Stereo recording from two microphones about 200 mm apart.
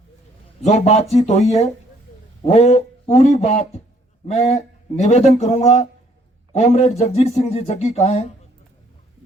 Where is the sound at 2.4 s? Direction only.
35° left (ahead or behind).